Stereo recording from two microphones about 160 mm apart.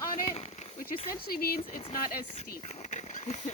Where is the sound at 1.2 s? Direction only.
70° left (ahead or behind).